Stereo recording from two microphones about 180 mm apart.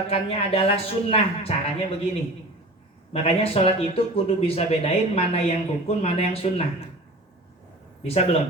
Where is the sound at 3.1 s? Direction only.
35° left (ahead or behind).